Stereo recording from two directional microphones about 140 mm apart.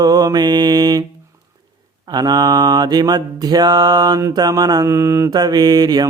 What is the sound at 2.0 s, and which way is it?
Mantra, 30° right (ahead or behind).